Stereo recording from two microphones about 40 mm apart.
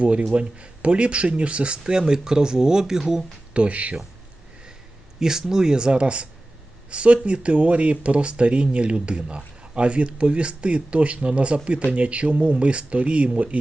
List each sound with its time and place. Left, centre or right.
0.0 s speech: right; by 3.0 s centre
3.5 s speech: right
5.2 s speech: centre; by 13.6 s right